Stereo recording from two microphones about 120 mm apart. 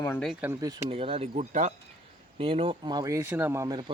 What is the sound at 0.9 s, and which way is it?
Speech, 50° right (ahead or behind).